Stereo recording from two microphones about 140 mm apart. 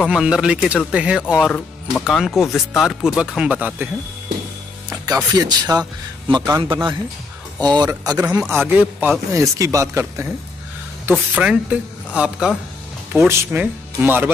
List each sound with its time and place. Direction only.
0.0 s a woman's voice: 5° right (ahead or behind)
1.3 s speech: 5° left (ahead or behind)
4.8 s a man's voice: 25° right (ahead or behind)
8.5 s a woman's voice: 15° right (ahead or behind)
11.1 s a woman's voice: 10° right (ahead or behind)